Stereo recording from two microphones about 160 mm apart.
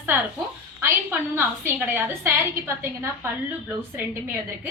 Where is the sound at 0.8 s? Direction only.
15° right (ahead or behind).